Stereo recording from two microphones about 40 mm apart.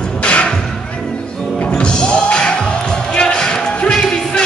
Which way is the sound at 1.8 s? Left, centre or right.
Left.